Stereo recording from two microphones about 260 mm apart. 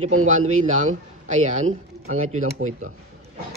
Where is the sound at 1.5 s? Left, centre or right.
Right.